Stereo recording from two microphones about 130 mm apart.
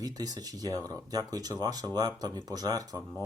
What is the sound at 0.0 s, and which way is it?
Speech, 30° right (ahead or behind).